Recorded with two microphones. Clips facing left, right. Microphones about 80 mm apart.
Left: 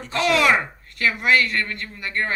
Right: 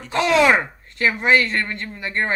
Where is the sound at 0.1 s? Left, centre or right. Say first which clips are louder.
Right 3 dB; right.